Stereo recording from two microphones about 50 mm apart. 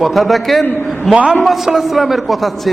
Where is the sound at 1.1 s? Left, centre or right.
Right.